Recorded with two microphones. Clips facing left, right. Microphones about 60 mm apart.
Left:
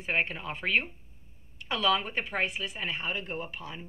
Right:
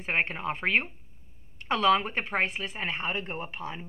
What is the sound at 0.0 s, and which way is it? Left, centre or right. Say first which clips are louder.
A woman's voice: right 2 dB; right.